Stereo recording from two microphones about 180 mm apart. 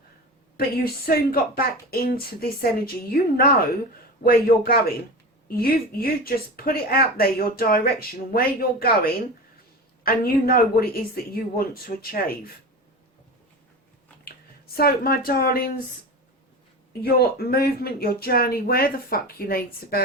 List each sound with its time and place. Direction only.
1.0 s speech: 55° left (ahead or behind)
14.8 s speech: 55° left (ahead or behind)
17.0 s speech: 60° left (ahead or behind)